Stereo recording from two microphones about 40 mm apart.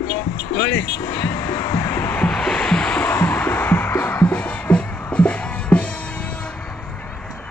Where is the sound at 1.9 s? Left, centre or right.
Left.